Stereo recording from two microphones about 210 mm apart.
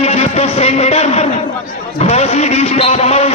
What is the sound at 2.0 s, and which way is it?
A man's voice, 30° left (ahead or behind).